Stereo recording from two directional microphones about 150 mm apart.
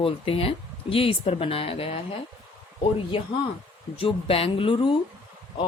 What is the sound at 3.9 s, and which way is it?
Speech, 40° left (ahead or behind).